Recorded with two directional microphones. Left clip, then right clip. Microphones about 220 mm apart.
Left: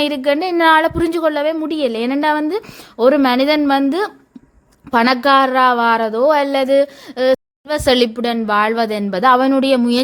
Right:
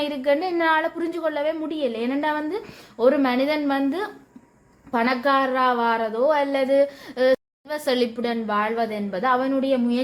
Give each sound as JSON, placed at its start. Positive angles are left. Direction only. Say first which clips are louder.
{"t": 0.0, "sound": "a woman's voice", "louder": "left 6 dB", "side_deg": 35}